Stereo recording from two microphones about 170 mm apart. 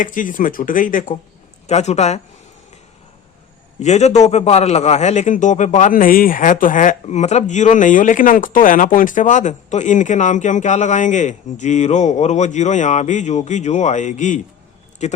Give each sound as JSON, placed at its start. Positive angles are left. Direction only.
{"t": 0.0, "sound": "a man's voice", "side_deg": 50}
{"t": 1.6, "sound": "speech", "side_deg": 40}
{"t": 3.8, "sound": "a man's voice", "side_deg": 40}